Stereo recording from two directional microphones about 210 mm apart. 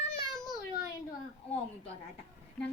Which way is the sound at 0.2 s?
20° left (ahead or behind).